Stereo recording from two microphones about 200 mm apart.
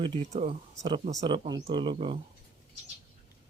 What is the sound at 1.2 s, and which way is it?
Speech, 25° right (ahead or behind).